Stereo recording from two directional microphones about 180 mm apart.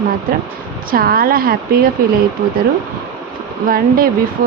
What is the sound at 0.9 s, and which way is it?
Speech, 55° right (ahead or behind).